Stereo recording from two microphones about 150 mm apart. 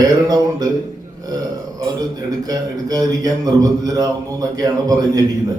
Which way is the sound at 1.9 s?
25° right (ahead or behind).